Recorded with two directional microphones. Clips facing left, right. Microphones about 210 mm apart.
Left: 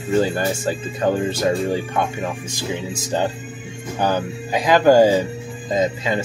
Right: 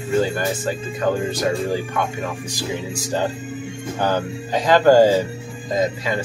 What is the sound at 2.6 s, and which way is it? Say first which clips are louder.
Speech: right 1 dB; 20° left (ahead or behind).